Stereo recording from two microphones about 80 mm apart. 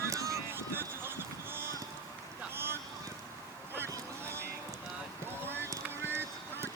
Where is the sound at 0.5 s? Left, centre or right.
Right.